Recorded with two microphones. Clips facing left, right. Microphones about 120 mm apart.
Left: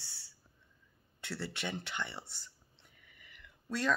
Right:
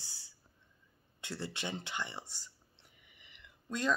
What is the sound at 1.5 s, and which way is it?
Speech, 15° right (ahead or behind).